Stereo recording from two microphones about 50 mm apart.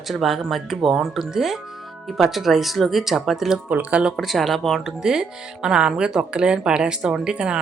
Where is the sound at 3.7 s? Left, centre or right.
Right.